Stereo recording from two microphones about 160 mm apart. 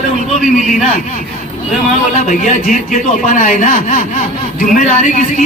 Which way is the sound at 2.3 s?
55° left (ahead or behind).